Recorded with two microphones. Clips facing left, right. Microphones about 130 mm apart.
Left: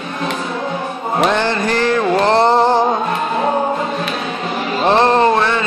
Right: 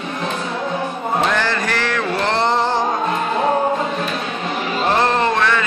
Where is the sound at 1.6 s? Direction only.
35° left (ahead or behind).